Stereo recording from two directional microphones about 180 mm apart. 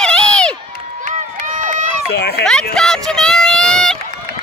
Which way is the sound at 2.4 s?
5° left (ahead or behind).